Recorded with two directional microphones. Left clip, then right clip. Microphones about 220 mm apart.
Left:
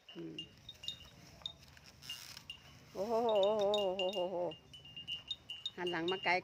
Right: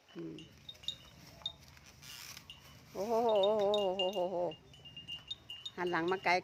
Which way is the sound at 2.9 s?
10° right (ahead or behind).